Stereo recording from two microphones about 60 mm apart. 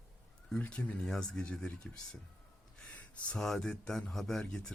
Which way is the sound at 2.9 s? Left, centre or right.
Left.